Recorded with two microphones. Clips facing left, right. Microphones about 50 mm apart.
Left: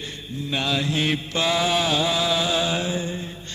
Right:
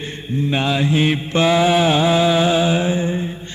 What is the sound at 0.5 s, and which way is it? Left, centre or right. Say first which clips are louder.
Mantra: right 5 dB; right.